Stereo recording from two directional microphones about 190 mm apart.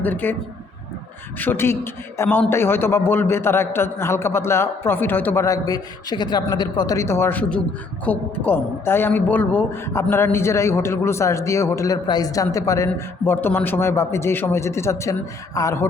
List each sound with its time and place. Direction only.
0.0 s a woman's voice: 10° left (ahead or behind)
1.4 s a woman's voice: 10° left (ahead or behind)